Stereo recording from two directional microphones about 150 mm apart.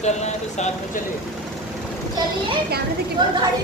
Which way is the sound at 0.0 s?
50° left (ahead or behind).